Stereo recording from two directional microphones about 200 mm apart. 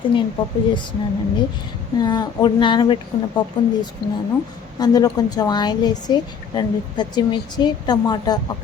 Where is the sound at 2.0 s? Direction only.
20° left (ahead or behind).